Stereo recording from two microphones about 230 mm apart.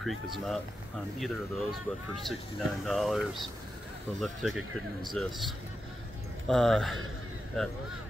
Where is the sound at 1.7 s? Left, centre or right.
Centre.